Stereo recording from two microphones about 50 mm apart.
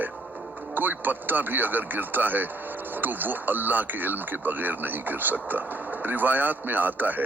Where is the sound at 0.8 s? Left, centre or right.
Right.